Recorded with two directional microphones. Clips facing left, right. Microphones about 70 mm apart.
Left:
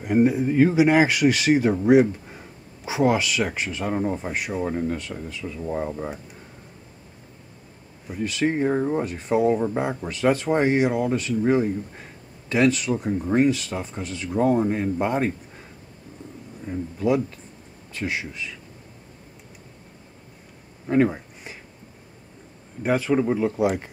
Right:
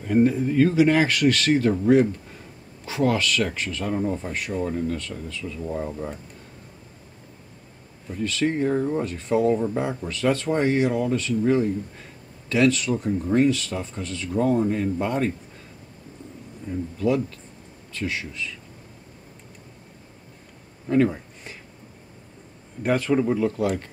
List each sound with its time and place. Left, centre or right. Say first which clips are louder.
0.0 s speech: even; centre
3.9 s speech: even; left
4.6 s speech: left 1 dB; left
8.2 s speech: left 1 dB; centre
16.7 s speech: even; left
17.0 s speech: left 1 dB; centre
20.9 s speech: even; left
22.8 s speech: even; centre